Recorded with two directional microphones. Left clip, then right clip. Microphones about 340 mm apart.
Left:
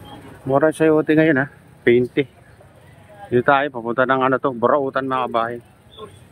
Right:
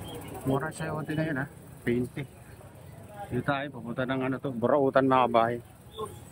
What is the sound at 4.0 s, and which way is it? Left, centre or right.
Speech, centre.